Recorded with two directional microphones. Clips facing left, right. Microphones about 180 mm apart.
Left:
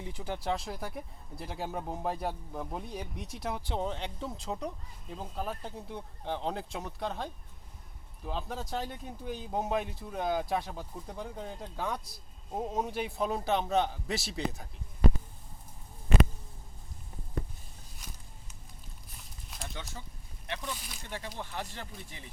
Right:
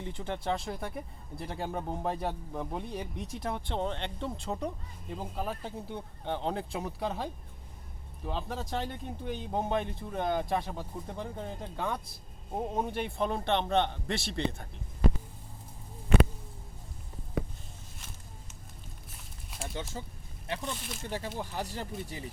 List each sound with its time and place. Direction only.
0.0 s speech: 5° left (ahead or behind)
20.7 s speech: centre (ahead or behind)
21.0 s speech: 40° right (ahead or behind)